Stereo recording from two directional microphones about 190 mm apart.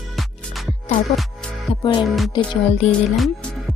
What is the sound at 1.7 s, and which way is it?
Music, 25° left (ahead or behind).